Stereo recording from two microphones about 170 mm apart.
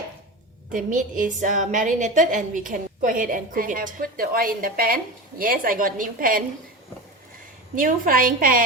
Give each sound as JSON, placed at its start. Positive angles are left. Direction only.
{"t": 0.7, "sound": "a woman's voice", "side_deg": -50}
{"t": 7.8, "sound": "a woman's voice", "side_deg": -55}